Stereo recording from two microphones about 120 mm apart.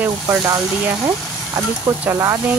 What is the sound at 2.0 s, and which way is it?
Speech, 25° right (ahead or behind).